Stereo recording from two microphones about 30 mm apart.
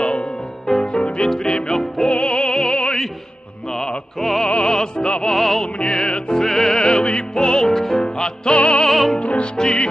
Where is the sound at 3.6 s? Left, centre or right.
Centre.